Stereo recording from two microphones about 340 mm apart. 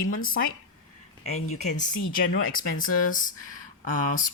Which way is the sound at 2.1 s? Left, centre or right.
Left.